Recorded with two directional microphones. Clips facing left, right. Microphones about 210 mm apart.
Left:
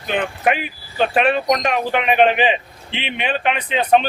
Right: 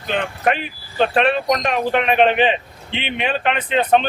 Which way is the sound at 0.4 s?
5° left (ahead or behind).